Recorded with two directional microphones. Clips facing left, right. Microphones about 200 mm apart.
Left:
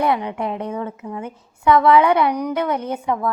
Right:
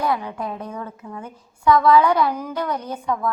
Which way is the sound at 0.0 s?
25° left (ahead or behind).